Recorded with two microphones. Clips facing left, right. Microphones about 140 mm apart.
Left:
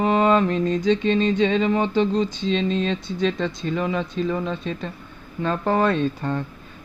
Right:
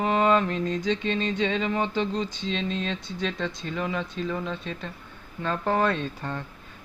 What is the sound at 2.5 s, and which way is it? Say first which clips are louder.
Speech: left 7 dB; 30° left (ahead or behind).